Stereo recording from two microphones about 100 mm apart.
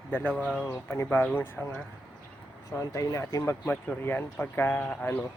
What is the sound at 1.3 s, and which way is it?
Speech, 20° left (ahead or behind).